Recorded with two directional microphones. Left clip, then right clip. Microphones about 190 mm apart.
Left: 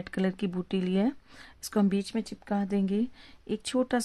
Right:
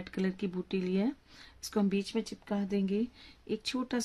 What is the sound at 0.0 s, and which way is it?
Speech, 50° left (ahead or behind).